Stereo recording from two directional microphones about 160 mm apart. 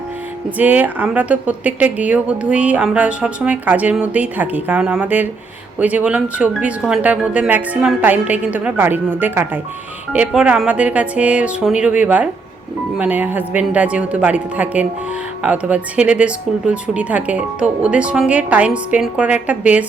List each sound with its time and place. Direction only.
0.5 s speech: 10° right (ahead or behind)